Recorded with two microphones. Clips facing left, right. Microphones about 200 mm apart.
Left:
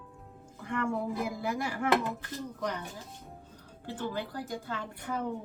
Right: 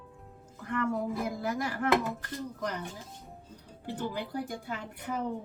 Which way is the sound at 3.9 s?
15° right (ahead or behind).